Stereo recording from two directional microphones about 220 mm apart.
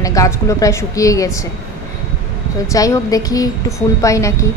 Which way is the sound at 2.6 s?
15° left (ahead or behind).